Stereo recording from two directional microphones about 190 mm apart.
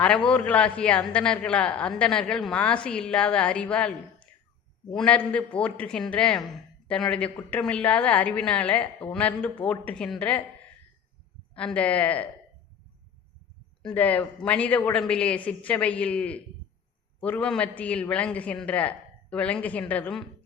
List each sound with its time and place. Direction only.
0.0 s a man's voice: 5° left (ahead or behind)
11.5 s a man's voice: 5° left (ahead or behind)
13.8 s a man's voice: 10° left (ahead or behind)